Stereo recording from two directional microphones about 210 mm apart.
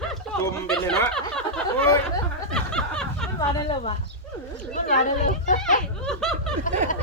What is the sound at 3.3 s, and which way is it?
A woman's voice, 25° left (ahead or behind).